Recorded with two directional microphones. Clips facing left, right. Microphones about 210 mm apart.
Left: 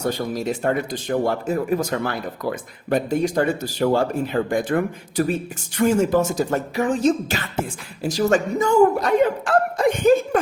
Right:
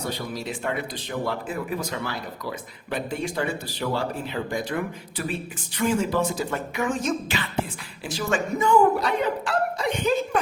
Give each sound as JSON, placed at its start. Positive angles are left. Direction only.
{"t": 0.0, "sound": "speech", "side_deg": 45}